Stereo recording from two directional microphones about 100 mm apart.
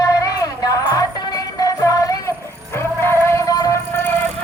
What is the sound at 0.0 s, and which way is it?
Music, 35° left (ahead or behind).